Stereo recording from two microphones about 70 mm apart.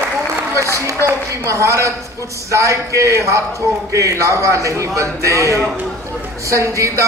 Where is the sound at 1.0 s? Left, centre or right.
Right.